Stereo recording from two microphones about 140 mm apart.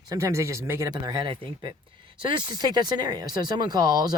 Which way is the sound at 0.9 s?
35° right (ahead or behind).